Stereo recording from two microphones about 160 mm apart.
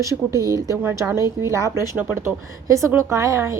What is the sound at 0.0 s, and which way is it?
A woman's voice, 20° right (ahead or behind).